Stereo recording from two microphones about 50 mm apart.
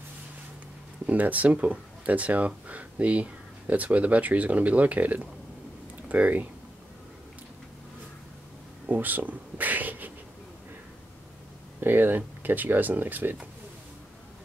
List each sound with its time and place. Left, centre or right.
1.0 s speech: right
8.8 s speech: right
11.8 s speech: right